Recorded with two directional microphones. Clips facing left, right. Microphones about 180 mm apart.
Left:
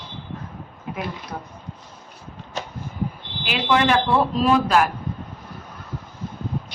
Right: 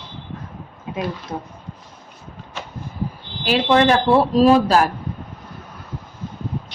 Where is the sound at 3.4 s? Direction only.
35° right (ahead or behind).